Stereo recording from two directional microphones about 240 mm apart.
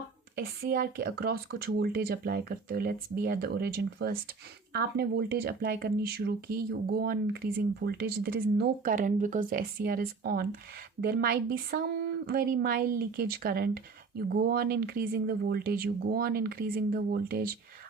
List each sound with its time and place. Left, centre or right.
0.3 s a woman's voice: right